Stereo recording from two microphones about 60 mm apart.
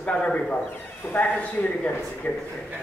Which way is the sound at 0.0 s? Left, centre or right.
Centre.